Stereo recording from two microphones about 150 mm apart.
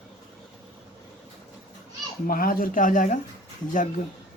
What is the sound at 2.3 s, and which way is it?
Speech, 70° left (ahead or behind).